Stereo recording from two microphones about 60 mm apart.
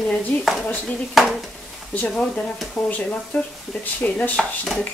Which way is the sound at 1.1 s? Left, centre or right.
Centre.